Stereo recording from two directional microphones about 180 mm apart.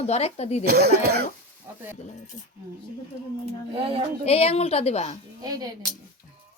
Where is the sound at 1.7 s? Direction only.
15° right (ahead or behind).